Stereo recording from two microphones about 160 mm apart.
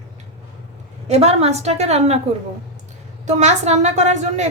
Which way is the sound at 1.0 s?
40° right (ahead or behind).